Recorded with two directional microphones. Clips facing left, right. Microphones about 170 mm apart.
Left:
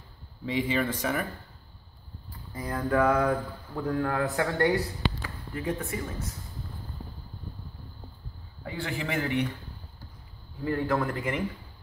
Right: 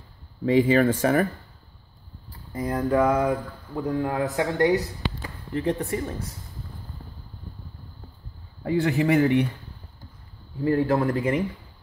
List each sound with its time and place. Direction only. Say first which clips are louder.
0.5 s speech: right 9 dB; 45° right (ahead or behind)
2.5 s speech: right 5 dB; 25° right (ahead or behind)
3.0 s speech: right 1 dB; 15° right (ahead or behind)
5.5 s speech: right 6 dB; 35° right (ahead or behind)
8.6 s speech: right 11 dB; 40° right (ahead or behind)
10.6 s speech: right 6 dB; 30° right (ahead or behind)